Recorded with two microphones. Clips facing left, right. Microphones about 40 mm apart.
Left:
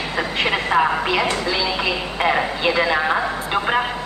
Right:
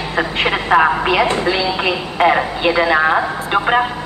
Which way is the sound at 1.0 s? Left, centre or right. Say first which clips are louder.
Right 5 dB; right.